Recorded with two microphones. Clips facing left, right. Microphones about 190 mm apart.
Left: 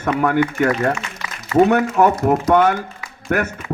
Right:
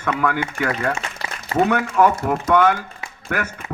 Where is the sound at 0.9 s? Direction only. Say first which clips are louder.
Even; 35° right (ahead or behind).